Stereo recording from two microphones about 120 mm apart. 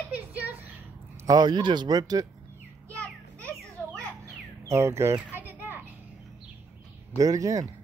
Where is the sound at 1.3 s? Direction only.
35° right (ahead or behind).